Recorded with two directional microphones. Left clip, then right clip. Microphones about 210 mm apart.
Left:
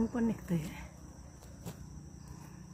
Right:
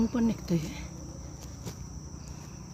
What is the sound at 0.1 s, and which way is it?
Speech, 30° right (ahead or behind).